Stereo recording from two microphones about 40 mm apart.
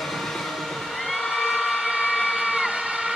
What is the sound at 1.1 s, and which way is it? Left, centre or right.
Vehicle, centre.